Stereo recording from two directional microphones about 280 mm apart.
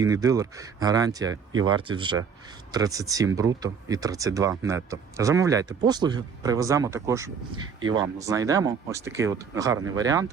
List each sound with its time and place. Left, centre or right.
0.0 s speech: centre